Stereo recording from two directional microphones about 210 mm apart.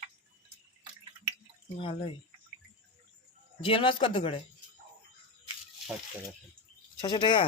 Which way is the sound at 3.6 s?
25° left (ahead or behind).